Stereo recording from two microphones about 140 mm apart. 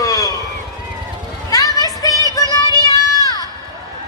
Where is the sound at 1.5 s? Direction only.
25° left (ahead or behind).